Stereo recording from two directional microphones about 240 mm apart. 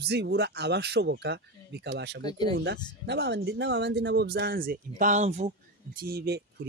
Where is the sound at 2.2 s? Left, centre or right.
Centre.